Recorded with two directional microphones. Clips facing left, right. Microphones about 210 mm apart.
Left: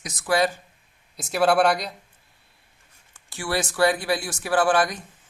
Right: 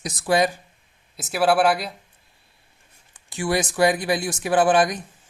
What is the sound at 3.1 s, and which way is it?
Speech, 20° right (ahead or behind).